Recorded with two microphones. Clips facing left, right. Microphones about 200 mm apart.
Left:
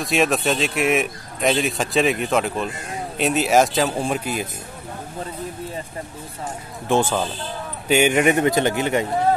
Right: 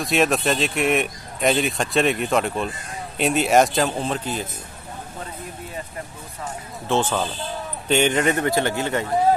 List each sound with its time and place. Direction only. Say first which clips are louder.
0.0 s speech: even; centre (ahead or behind)
6.9 s speech: left 2 dB; 10° left (ahead or behind)